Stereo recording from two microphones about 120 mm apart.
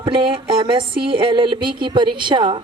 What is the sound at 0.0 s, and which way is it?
A man's voice, 40° right (ahead or behind).